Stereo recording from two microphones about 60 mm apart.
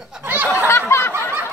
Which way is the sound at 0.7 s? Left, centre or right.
Left.